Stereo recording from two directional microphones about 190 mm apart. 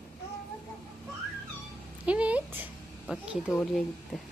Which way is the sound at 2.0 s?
5° right (ahead or behind).